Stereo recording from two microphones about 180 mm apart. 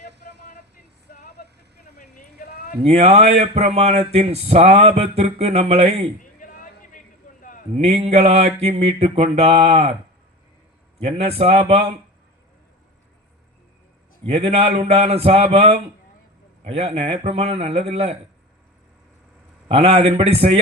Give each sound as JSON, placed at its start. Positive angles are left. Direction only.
{"t": 1.1, "sound": "vehicle", "side_deg": 55}
{"t": 2.8, "sound": "speech", "side_deg": -35}
{"t": 6.2, "sound": "a sound", "side_deg": 45}
{"t": 7.8, "sound": "speech", "side_deg": -35}
{"t": 11.0, "sound": "speech", "side_deg": -35}
{"t": 14.3, "sound": "speech", "side_deg": -35}
{"t": 19.6, "sound": "speech", "side_deg": -35}